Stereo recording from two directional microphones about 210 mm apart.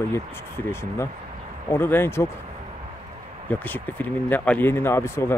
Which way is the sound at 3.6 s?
10° left (ahead or behind).